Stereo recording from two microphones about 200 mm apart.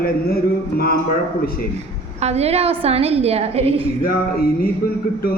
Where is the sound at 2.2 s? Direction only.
30° right (ahead or behind).